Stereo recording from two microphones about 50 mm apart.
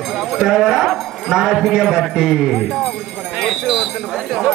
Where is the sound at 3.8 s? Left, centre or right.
Centre.